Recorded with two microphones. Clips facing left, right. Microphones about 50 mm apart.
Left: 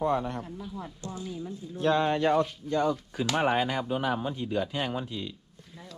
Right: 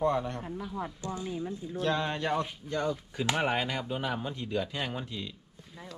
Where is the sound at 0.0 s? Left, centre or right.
Centre.